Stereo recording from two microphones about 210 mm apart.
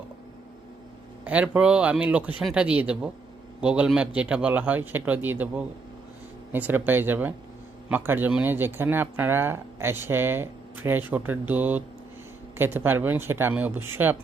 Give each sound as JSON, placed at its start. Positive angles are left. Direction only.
{"t": 1.2, "sound": "speech", "side_deg": -5}